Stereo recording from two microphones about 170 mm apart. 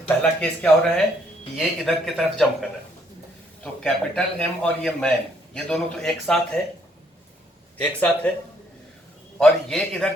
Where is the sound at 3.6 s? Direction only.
5° left (ahead or behind).